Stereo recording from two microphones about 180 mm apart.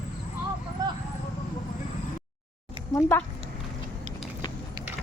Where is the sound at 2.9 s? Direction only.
15° left (ahead or behind).